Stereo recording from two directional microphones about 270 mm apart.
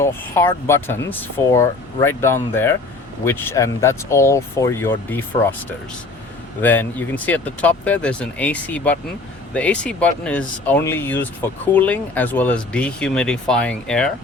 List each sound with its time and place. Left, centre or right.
0.0 s speech: centre
6.6 s speech: centre